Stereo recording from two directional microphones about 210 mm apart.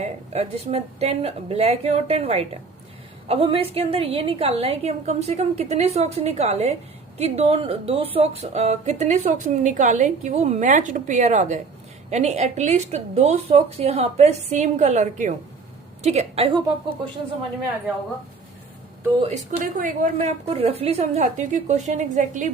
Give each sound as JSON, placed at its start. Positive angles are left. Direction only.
{"t": 0.0, "sound": "a woman's voice", "side_deg": -30}
{"t": 19.5, "sound": "speech", "side_deg": -35}